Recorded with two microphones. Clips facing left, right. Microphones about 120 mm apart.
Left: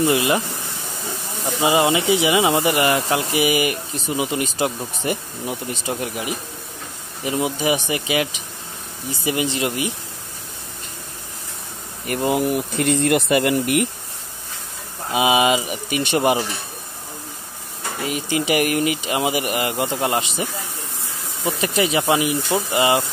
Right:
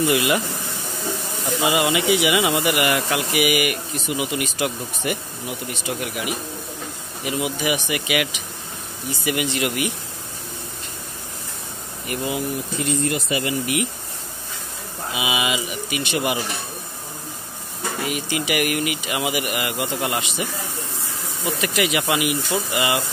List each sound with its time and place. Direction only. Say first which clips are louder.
0.0 s speech: left 1 dB; 30° left (ahead or behind)
1.6 s speech: left 3 dB; 30° left (ahead or behind)
12.1 s speech: left 6 dB; 50° left (ahead or behind)
15.1 s speech: left 8 dB; 40° left (ahead or behind)
18.0 s speech: left 4 dB; 35° left (ahead or behind)
21.5 s speech: left 2 dB; 30° left (ahead or behind)